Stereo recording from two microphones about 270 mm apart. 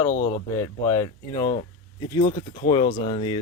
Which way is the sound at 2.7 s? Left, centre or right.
Centre.